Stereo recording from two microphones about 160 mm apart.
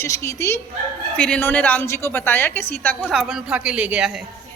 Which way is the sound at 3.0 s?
5° right (ahead or behind).